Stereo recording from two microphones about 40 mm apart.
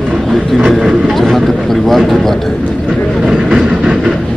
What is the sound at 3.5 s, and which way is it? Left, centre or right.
Train, centre.